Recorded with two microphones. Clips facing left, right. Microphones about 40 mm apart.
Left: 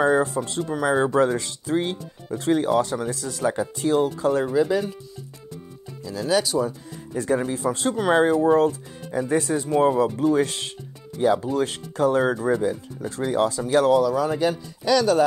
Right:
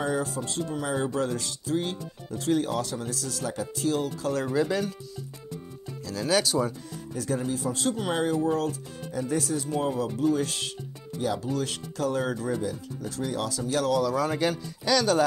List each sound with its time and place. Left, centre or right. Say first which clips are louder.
0.0 s speech: left 8 dB; left
4.5 s a man's voice: left 5 dB; centre
6.0 s a man's voice: left 3 dB; centre
7.2 s speech: left 6 dB; left
10.3 s speech: left 6 dB; left
14.0 s a man's voice: left 4 dB; centre